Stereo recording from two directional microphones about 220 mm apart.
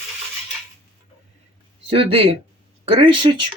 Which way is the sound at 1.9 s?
25° right (ahead or behind).